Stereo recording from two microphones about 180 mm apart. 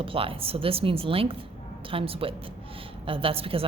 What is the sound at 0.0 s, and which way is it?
A woman's voice, 30° right (ahead or behind).